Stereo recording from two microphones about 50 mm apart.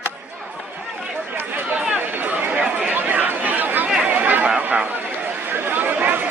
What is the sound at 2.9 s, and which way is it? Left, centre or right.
Chatter, right.